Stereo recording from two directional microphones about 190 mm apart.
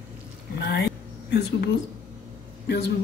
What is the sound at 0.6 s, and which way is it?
A woman's voice, 65° left (ahead or behind).